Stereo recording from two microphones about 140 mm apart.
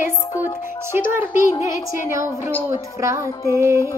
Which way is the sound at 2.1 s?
20° right (ahead or behind).